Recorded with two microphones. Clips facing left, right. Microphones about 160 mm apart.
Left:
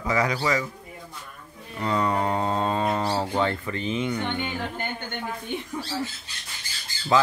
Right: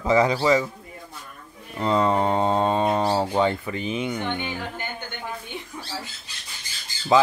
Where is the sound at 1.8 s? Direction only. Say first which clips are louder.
Right 4 dB; 25° right (ahead or behind).